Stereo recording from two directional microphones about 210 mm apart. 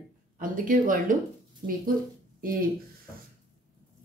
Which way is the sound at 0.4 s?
40° right (ahead or behind).